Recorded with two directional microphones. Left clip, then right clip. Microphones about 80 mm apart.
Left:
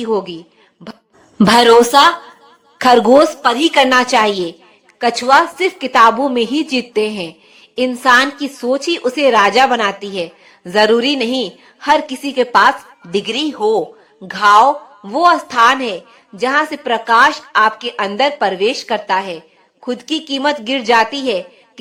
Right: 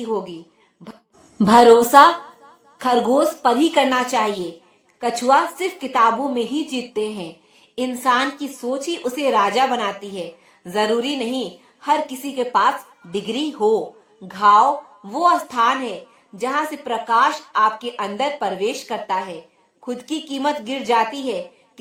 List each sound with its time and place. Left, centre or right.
0.0 s a woman's voice: left
2.8 s a woman's voice: left
3.2 s a woman's voice: left
3.7 s a woman's voice: left
5.5 s a woman's voice: left
6.0 s a woman's voice: left
13.6 s a man's voice: left
14.3 s a woman's voice: left
15.1 s speech: left
15.5 s a woman's voice: left